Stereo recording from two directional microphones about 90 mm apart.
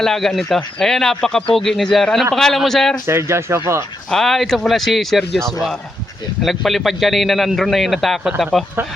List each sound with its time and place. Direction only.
0.0 s a man's voice: 5° left (ahead or behind)
3.1 s speech: 30° right (ahead or behind)
4.1 s a man's voice: 5° left (ahead or behind)